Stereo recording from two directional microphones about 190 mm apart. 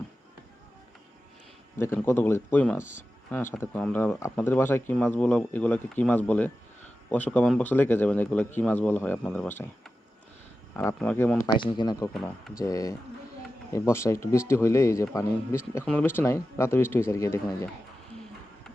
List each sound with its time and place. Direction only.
2.0 s speech: 15° left (ahead or behind)
10.8 s speech: 10° left (ahead or behind)
11.4 s speech: 25° left (ahead or behind)